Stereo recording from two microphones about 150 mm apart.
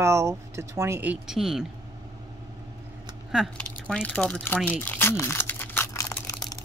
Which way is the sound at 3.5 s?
10° left (ahead or behind).